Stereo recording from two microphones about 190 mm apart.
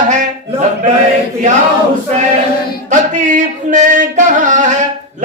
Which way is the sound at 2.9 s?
40° right (ahead or behind).